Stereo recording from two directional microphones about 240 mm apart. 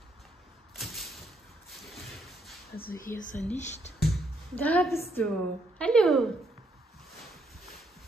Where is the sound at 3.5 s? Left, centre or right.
Left.